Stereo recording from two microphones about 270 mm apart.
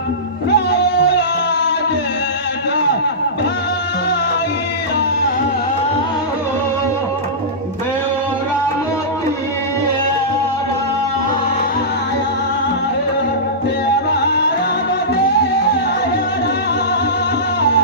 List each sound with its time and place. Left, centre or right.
0.5 s music: left